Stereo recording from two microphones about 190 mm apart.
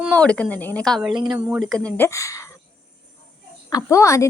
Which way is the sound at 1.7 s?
5° left (ahead or behind).